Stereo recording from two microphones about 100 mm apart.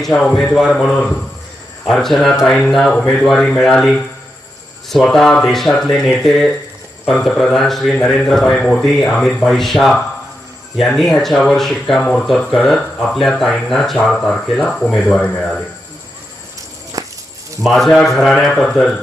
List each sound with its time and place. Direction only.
0.0 s speech: 5° left (ahead or behind)
17.0 s a sound: 35° right (ahead or behind)
17.6 s speech: centre (ahead or behind)